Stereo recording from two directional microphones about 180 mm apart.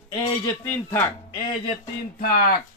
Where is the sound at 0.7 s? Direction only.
10° left (ahead or behind).